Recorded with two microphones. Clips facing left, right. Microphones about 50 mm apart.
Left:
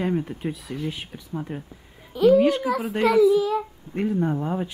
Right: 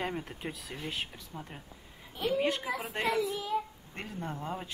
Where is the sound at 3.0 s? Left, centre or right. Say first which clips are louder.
Left 15 dB; left.